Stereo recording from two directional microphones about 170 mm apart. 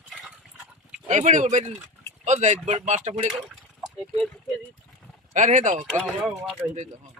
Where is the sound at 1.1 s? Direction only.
45° right (ahead or behind).